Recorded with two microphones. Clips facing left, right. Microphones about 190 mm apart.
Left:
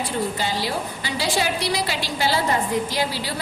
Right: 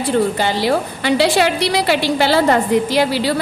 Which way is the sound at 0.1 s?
65° right (ahead or behind).